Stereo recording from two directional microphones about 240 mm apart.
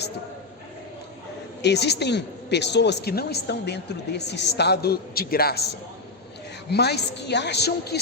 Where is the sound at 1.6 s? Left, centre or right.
Left.